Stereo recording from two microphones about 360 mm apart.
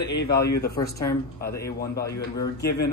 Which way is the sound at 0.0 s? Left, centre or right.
Left.